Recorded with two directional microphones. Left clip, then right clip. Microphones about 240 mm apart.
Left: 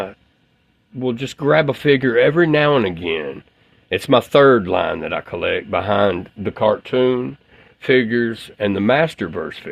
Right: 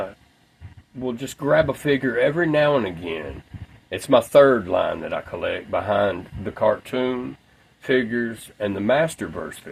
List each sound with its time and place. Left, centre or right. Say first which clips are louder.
1.0 s speech: left 6 dB; left